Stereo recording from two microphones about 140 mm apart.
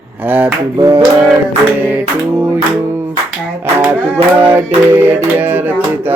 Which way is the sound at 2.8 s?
15° right (ahead or behind).